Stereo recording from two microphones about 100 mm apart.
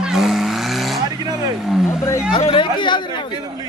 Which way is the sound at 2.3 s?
55° left (ahead or behind).